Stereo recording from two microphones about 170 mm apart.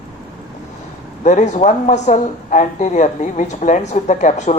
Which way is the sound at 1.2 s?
45° left (ahead or behind).